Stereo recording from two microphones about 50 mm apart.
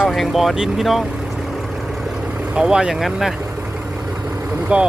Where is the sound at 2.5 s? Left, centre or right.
Centre.